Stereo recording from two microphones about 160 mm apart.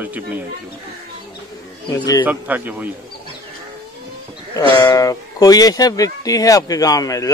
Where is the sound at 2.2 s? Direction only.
10° right (ahead or behind).